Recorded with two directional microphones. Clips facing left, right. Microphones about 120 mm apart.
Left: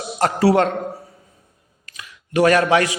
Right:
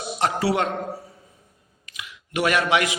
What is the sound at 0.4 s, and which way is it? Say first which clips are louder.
Speech: left 9 dB; 45° left (ahead or behind).